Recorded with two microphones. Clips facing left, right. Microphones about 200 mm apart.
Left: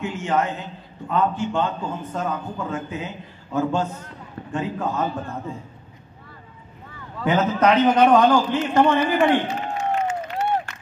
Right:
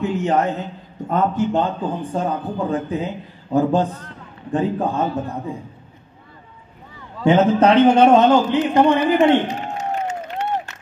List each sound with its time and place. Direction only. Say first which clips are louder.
0.0 s a man's voice: right 4 dB; 35° right (ahead or behind)
7.2 s a man's voice: right 5 dB; 30° right (ahead or behind)